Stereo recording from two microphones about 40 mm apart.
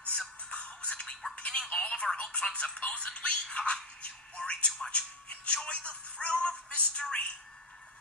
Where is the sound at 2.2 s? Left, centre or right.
Left.